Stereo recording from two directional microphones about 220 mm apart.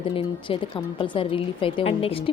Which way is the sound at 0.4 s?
20° left (ahead or behind).